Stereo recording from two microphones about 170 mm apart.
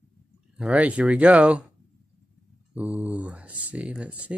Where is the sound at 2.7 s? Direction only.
10° right (ahead or behind).